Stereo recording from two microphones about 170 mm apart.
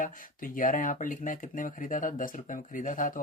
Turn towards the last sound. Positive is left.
turn(degrees=50)  # may be behind; listen again after turning